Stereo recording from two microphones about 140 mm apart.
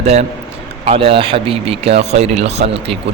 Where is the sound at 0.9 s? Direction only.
40° right (ahead or behind).